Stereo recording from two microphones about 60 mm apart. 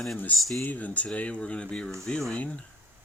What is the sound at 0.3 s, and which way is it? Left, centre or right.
Speech, centre.